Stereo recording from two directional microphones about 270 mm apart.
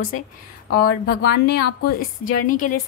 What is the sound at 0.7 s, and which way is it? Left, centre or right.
A woman's voice, left.